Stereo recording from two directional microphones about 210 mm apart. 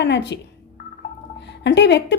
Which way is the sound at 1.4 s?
55° left (ahead or behind).